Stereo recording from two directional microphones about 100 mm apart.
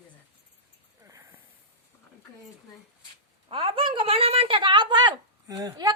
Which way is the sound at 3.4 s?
60° right (ahead or behind).